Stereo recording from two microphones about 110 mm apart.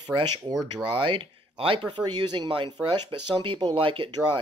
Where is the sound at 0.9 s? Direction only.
50° right (ahead or behind).